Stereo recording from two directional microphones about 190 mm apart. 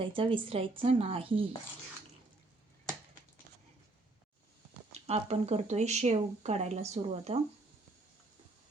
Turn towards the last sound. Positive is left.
turn(degrees=-35)  # may be behind; listen again after turning